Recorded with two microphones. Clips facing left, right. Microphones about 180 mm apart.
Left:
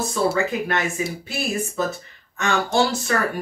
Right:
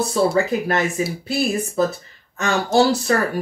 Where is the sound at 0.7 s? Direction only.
35° right (ahead or behind).